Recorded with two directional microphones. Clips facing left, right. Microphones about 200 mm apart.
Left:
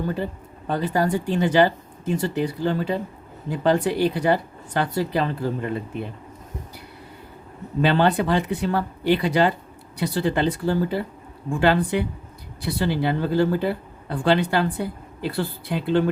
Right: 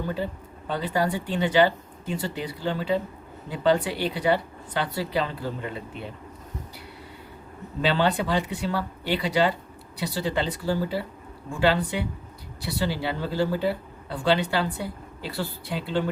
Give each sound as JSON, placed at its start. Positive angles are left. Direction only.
{"t": 0.7, "sound": "speech", "side_deg": 45}
{"t": 7.8, "sound": "speech", "side_deg": 50}